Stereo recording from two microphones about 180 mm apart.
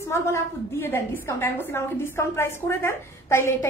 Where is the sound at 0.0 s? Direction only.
15° left (ahead or behind).